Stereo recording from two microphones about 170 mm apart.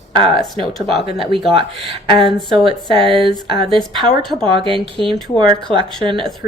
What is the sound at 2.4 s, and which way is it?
Speech, 30° right (ahead or behind).